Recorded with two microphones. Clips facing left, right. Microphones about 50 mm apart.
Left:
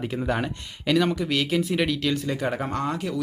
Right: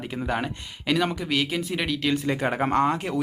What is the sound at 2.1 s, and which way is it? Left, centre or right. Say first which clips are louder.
Speech: right 1 dB; right.